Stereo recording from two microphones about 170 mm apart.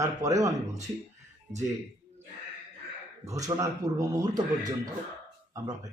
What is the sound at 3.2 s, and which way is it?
Speech, 20° right (ahead or behind).